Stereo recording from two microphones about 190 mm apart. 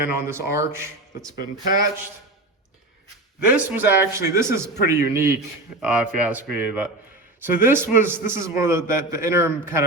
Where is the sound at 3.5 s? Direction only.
10° right (ahead or behind).